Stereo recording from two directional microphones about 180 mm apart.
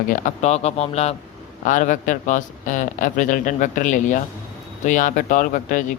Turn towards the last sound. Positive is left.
turn(degrees=50)  # may be behind; listen again after turning